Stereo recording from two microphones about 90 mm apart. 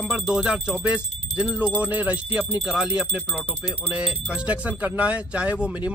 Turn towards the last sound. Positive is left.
turn(degrees=-15)  # may be behind; listen again after turning